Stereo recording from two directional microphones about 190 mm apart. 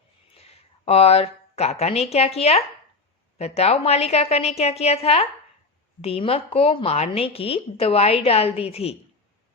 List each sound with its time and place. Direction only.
0.3 s speech: 30° left (ahead or behind)